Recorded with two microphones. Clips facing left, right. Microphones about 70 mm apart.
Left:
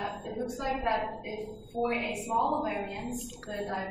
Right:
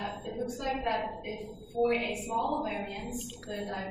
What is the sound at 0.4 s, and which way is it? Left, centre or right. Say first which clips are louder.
A woman's voice: left 1 dB; left.